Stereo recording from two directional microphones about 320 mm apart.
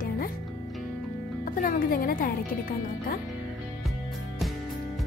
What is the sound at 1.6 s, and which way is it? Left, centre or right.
A woman's voice, left.